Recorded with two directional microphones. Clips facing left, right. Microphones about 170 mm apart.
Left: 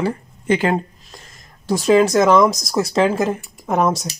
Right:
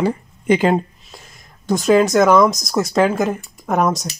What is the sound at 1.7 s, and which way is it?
Speech, centre (ahead or behind).